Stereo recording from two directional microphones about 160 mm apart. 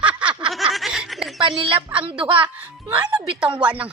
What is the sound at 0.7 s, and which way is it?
Snicker, centre (ahead or behind).